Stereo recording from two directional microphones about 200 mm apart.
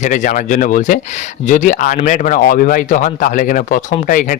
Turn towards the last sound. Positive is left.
turn(degrees=45)  # may be behind; listen again after turning